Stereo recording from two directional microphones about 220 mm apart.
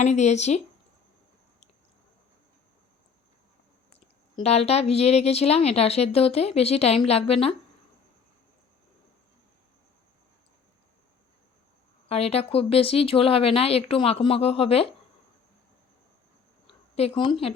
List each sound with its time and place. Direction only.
0.0 s speech: 30° left (ahead or behind)
4.4 s speech: 30° left (ahead or behind)
12.0 s speech: 30° left (ahead or behind)
16.9 s speech: 25° left (ahead or behind)